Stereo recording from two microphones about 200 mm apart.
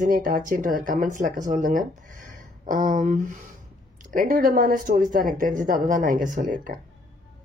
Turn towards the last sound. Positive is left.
turn(degrees=-40)  # may be behind; listen again after turning